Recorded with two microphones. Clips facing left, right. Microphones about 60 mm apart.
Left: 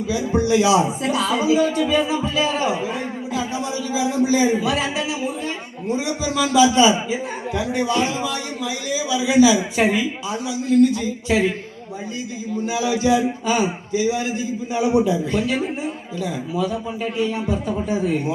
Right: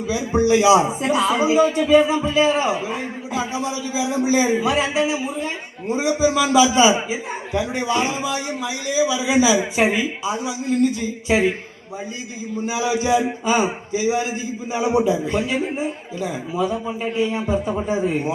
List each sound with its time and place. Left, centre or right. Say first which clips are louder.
0.1 s a man's voice: right 2 dB; right
12.6 s a man's voice: left 1 dB; centre